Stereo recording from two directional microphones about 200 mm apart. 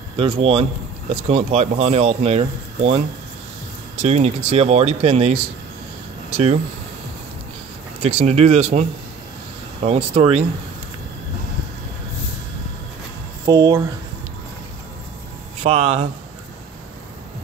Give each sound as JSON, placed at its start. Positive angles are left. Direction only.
{"t": 0.2, "sound": "speech", "side_deg": -25}
{"t": 4.0, "sound": "speech", "side_deg": -30}
{"t": 8.0, "sound": "speech", "side_deg": -30}
{"t": 9.8, "sound": "speech", "side_deg": -35}
{"t": 13.5, "sound": "speech", "side_deg": -15}
{"t": 15.6, "sound": "speech", "side_deg": -30}